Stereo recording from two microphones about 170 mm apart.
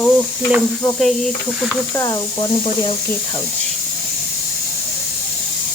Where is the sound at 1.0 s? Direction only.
Centre (ahead or behind).